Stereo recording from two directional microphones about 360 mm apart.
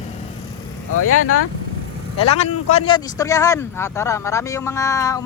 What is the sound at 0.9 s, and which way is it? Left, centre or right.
Speech, left.